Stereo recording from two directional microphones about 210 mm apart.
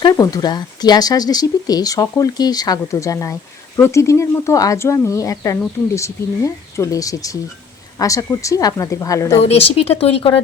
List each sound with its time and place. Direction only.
0.0 s speech: 20° left (ahead or behind)
9.4 s speech: 30° left (ahead or behind)